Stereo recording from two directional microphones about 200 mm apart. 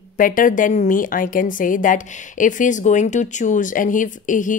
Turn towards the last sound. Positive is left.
turn(degrees=40)  # may be behind; listen again after turning